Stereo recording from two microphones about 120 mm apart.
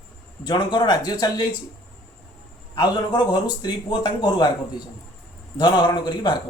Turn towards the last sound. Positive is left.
turn(degrees=40)  # may be behind; listen again after turning